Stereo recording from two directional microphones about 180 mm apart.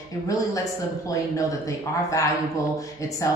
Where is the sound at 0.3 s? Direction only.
20° left (ahead or behind).